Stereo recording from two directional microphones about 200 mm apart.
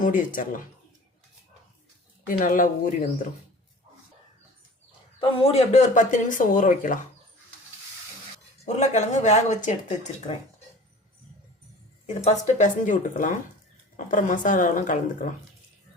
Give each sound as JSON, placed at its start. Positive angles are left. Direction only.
{"t": 0.0, "sound": "speech", "side_deg": 40}
{"t": 2.2, "sound": "speech", "side_deg": 45}
{"t": 5.2, "sound": "speech", "side_deg": 30}
{"t": 8.5, "sound": "speech", "side_deg": 35}
{"t": 12.0, "sound": "speech", "side_deg": 35}